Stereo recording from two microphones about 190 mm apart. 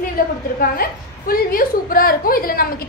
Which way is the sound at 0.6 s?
50° left (ahead or behind).